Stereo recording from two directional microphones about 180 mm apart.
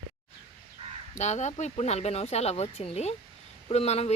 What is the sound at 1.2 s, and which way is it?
Speech, 40° left (ahead or behind).